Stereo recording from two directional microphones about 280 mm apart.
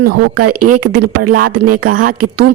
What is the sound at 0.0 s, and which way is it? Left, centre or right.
Speech, right.